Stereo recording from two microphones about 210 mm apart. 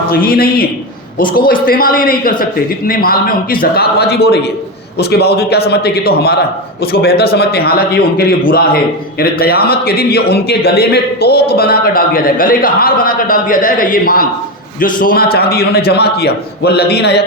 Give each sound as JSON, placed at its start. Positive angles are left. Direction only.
{"t": 0.1, "sound": "a man's voice", "side_deg": 45}